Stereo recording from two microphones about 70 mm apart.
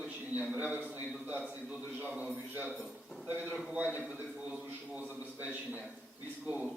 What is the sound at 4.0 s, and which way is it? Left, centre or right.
A man's voice, centre.